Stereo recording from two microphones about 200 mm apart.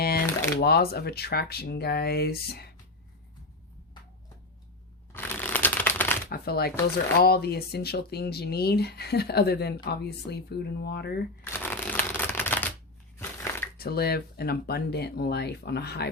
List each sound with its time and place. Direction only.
0.6 s speech: 50° left (ahead or behind)
5.1 s shuffling cards: 10° left (ahead or behind)
6.3 s speech: 50° left (ahead or behind)
11.6 s a sound: 10° left (ahead or behind)
13.1 s crushing: 10° left (ahead or behind)
13.7 s speech: 50° left (ahead or behind)